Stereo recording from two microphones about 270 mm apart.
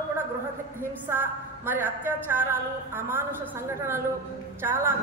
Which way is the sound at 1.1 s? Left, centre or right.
Centre.